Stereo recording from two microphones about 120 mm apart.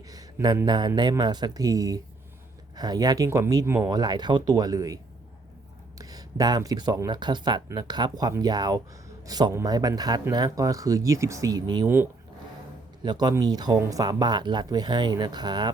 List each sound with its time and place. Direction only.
0.1 s speech: 30° right (ahead or behind)
6.0 s speech: 30° right (ahead or behind)
13.0 s speech: 35° right (ahead or behind)